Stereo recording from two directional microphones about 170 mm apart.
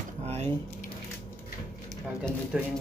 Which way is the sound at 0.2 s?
35° right (ahead or behind).